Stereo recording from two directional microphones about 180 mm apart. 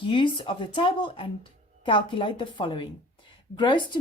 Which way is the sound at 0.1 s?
30° left (ahead or behind).